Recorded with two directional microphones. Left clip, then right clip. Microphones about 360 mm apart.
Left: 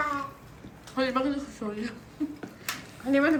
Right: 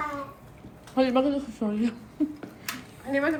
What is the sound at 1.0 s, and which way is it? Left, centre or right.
Speech, centre.